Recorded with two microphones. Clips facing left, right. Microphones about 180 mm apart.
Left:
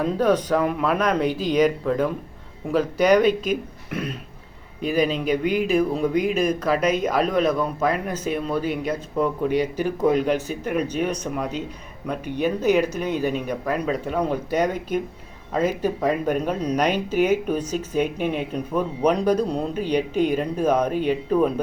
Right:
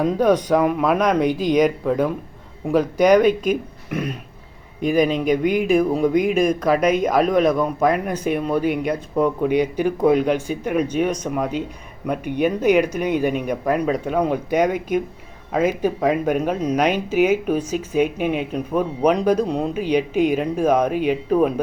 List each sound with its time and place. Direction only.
0.0 s speech: 10° right (ahead or behind)
4.8 s speech: 45° right (ahead or behind)
5.7 s speech: 10° right (ahead or behind)